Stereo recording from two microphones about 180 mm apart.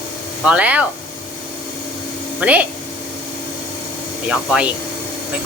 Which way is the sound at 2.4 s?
5° right (ahead or behind).